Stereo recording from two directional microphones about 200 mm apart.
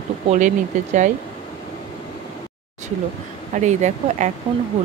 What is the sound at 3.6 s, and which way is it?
Speech, 35° right (ahead or behind).